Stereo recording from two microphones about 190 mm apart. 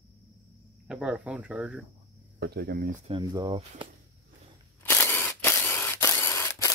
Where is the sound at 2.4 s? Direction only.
55° right (ahead or behind).